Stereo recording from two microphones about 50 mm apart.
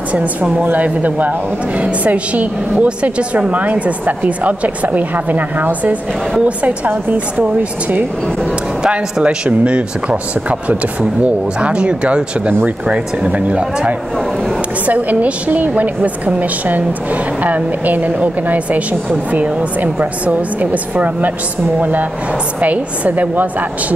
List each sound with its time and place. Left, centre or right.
0.1 s a woman's voice: right
8.8 s a woman's voice: right